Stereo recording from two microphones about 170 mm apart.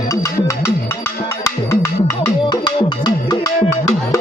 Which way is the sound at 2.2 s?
25° left (ahead or behind).